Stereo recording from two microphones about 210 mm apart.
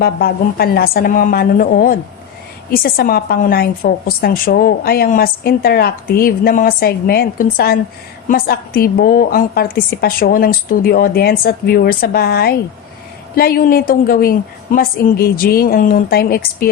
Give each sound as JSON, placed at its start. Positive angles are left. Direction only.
{"t": 0.0, "sound": "a woman's voice", "side_deg": 45}